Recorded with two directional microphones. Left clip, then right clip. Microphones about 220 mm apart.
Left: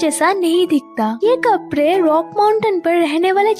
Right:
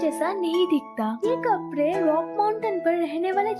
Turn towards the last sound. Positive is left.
turn(degrees=40)  # may be behind; listen again after turning